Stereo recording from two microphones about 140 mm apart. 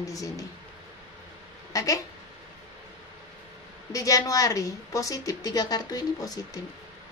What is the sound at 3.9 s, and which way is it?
Speech, 25° left (ahead or behind).